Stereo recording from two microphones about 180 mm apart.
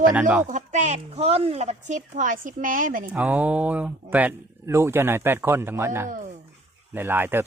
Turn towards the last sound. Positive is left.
turn(degrees=-10)  # may be behind; listen again after turning